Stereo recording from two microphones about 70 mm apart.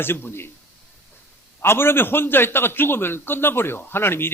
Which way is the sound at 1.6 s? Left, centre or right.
Left.